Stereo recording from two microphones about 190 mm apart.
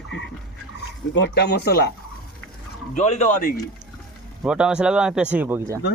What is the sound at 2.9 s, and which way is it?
Speech, 35° left (ahead or behind).